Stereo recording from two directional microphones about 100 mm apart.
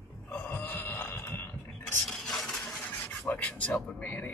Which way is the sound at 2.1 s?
5° left (ahead or behind).